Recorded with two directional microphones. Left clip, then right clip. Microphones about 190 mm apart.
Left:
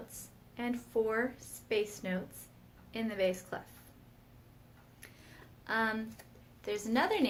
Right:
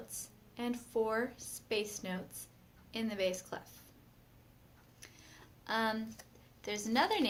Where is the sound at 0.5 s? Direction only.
25° right (ahead or behind).